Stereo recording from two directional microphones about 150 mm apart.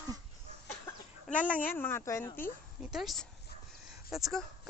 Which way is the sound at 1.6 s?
15° left (ahead or behind).